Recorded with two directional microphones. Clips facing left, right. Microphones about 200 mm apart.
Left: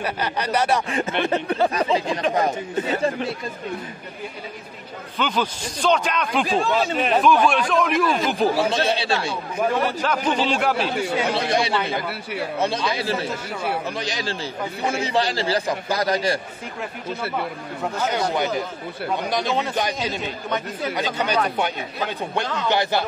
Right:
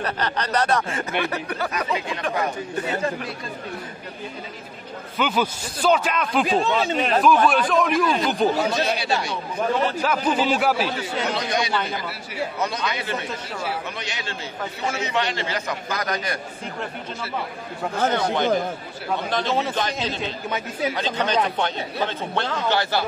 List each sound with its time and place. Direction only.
0.0 s speech: 10° left (ahead or behind)
5.1 s a man's voice: 10° right (ahead or behind)
8.6 s speech: 25° left (ahead or behind)
9.3 s speech: 10° left (ahead or behind)
10.0 s a man's voice: 5° right (ahead or behind)
11.3 s a man's voice: 30° left (ahead or behind)
18.1 s speech: 10° left (ahead or behind)
20.4 s a man's voice: 5° right (ahead or behind)
20.9 s speech: 10° left (ahead or behind)